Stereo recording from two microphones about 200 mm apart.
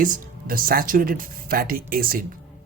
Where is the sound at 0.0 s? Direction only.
45° right (ahead or behind).